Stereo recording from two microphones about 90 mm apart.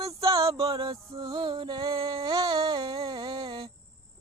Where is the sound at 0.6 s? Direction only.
75° right (ahead or behind); by 2.2 s 90° right.